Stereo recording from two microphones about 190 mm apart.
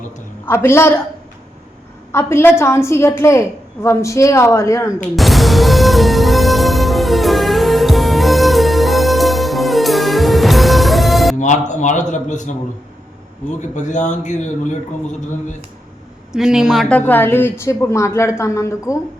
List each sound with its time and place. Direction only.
0.4 s a woman's voice: 10° left (ahead or behind)
2.1 s a woman's voice: 15° left (ahead or behind)
5.1 s music: centre (ahead or behind)
11.3 s a man's voice: 40° left (ahead or behind)
13.6 s a man's voice: 40° left (ahead or behind)
16.3 s a woman's voice: 5° right (ahead or behind); by 18.9 s 15° left (ahead or behind)